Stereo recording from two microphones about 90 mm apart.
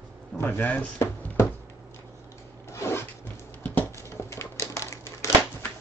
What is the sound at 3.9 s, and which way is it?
Typewriter, 30° left (ahead or behind).